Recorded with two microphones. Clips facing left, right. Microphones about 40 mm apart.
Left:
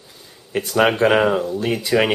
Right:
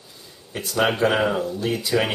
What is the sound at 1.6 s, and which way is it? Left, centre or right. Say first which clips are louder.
Speech: left 3 dB; left.